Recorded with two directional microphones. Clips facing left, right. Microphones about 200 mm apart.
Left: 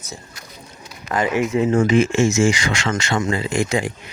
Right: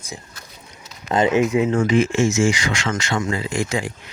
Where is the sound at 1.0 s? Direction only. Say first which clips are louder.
Right 3 dB; 20° right (ahead or behind).